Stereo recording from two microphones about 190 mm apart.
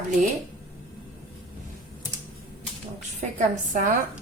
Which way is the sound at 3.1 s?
45° right (ahead or behind).